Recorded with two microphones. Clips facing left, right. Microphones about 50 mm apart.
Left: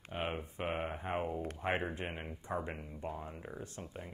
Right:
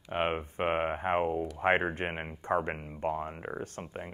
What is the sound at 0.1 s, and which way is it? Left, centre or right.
Speech, right.